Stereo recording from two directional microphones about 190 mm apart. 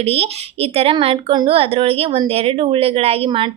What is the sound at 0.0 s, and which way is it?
Speech, 30° right (ahead or behind).